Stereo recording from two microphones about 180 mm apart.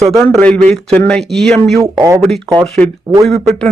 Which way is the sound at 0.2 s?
5° left (ahead or behind).